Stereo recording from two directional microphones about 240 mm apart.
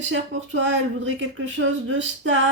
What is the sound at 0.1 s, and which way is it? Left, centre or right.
Speech, right.